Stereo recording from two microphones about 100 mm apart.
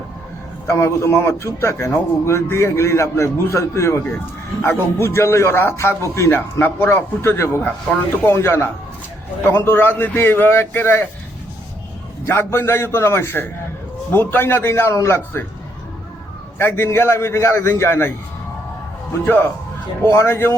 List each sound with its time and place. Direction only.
0.7 s a man's voice: 25° left (ahead or behind)
12.2 s a man's voice: 25° left (ahead or behind)
16.6 s a man's voice: 20° left (ahead or behind)
19.2 s a man's voice: 20° left (ahead or behind)